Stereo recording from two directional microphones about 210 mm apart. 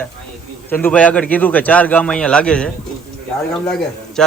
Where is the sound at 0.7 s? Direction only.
10° left (ahead or behind).